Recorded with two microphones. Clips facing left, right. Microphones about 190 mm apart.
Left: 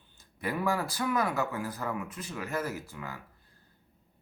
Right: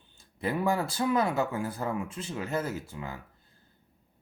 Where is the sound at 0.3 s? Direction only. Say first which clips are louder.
Right 2 dB; 25° right (ahead or behind).